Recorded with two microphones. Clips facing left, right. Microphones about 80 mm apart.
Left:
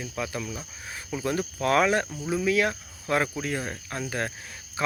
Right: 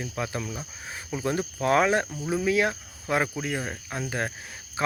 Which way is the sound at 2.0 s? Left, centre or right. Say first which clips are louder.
Right 1 dB; centre.